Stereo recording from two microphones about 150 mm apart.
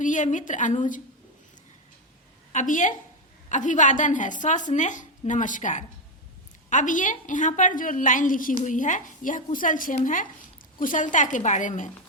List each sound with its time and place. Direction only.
0.0 s a woman's voice: 55° left (ahead or behind)
2.5 s a woman's voice: 55° left (ahead or behind)